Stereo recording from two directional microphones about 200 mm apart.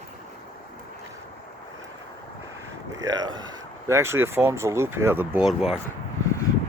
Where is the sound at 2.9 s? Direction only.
20° right (ahead or behind).